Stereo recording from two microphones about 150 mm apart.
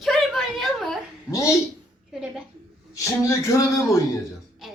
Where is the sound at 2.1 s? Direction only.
5° right (ahead or behind).